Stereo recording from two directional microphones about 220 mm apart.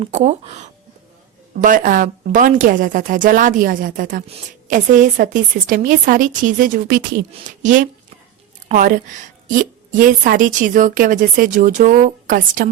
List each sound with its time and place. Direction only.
0.0 s a woman's voice: 30° right (ahead or behind)